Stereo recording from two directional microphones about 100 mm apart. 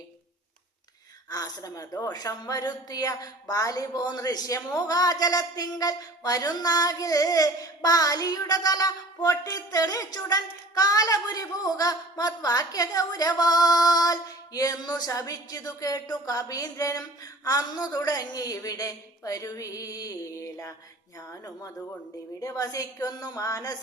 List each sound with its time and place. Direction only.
1.3 s a woman's voice: 40° left (ahead or behind)
22.4 s a woman's voice: 35° left (ahead or behind)